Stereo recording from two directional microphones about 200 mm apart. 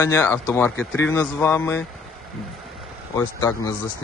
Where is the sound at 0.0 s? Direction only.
15° left (ahead or behind).